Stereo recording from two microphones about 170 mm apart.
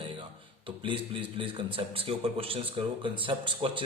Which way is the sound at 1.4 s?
30° right (ahead or behind).